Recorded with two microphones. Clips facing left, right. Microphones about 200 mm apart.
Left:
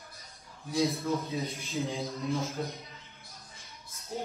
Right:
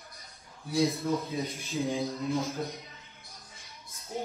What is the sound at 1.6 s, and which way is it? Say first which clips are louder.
Speech: right 3 dB; 15° right (ahead or behind).